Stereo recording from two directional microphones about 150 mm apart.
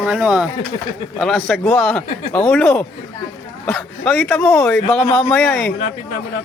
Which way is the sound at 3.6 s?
10° left (ahead or behind).